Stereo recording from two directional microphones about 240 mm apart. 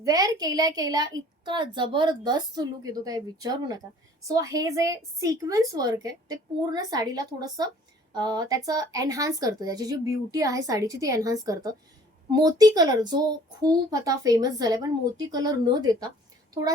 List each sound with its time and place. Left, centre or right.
0.0 s a woman's voice: centre